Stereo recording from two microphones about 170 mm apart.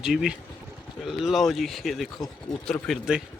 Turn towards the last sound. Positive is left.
turn(degrees=0)  # may be behind; listen again after turning